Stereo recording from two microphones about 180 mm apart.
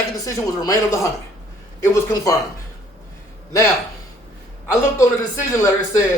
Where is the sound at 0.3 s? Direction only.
20° left (ahead or behind).